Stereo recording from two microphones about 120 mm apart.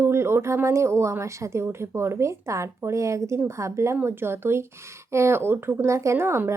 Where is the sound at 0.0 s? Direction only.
20° right (ahead or behind).